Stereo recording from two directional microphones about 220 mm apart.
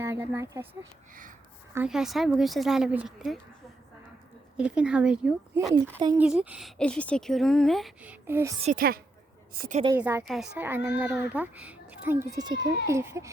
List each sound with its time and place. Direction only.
0.0 s a woman's voice: 10° right (ahead or behind)
4.5 s a woman's voice: 5° right (ahead or behind)
8.6 s a woman's voice: 40° right (ahead or behind)
10.0 s a child's voice: 5° right (ahead or behind)